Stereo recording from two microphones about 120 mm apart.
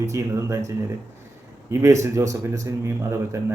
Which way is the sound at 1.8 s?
25° right (ahead or behind).